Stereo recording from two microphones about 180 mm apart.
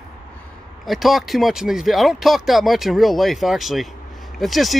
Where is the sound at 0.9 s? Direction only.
Centre (ahead or behind).